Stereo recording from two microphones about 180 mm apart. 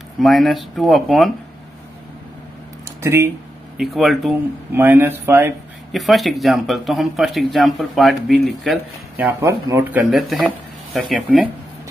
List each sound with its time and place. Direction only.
0.2 s speech: centre (ahead or behind)
3.0 s speech: 15° right (ahead or behind)
3.7 s speech: centre (ahead or behind)
4.7 s speech: 10° right (ahead or behind)
5.9 s speech: centre (ahead or behind)
9.1 s speech: 15° right (ahead or behind)
9.9 s speech: centre (ahead or behind)